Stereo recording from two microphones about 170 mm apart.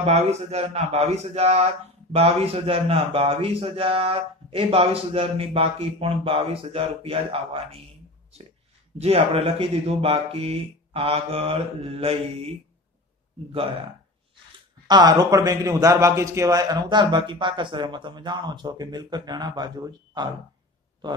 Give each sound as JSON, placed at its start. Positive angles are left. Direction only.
{"t": 0.0, "sound": "speech", "side_deg": -40}
{"t": 8.9, "sound": "speech", "side_deg": -35}
{"t": 14.9, "sound": "a man's voice", "side_deg": -25}